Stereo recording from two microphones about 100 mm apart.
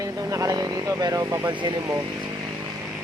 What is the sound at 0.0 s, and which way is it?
Speech, 35° right (ahead or behind).